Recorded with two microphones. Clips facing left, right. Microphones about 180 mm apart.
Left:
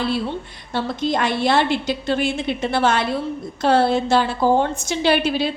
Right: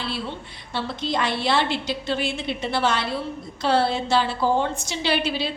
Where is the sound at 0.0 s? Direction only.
45° left (ahead or behind).